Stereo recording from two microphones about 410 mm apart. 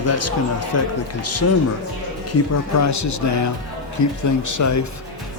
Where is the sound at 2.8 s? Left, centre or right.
Left.